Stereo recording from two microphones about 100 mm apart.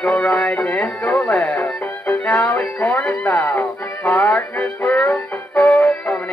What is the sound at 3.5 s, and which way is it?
Music, 15° left (ahead or behind).